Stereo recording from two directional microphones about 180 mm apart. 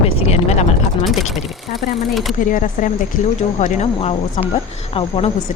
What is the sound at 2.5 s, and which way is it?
Speech, 50° left (ahead or behind).